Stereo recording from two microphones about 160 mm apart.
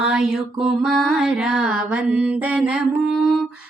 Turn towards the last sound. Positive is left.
turn(degrees=0)  # may be behind; listen again after turning